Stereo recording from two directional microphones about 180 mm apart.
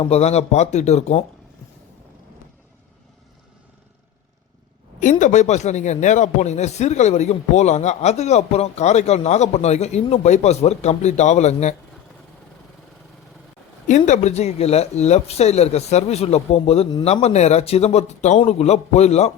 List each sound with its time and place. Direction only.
0.0 s speech: 35° left (ahead or behind)
4.9 s speech: 45° left (ahead or behind)
13.8 s speech: 45° left (ahead or behind)